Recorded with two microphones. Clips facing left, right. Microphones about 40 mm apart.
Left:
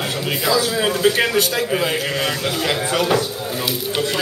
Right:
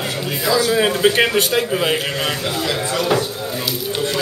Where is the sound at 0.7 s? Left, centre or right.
Centre.